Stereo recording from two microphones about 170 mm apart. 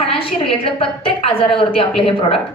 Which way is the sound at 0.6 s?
35° left (ahead or behind).